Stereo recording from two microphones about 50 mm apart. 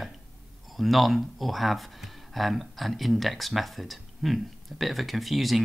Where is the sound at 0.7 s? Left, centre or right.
Centre.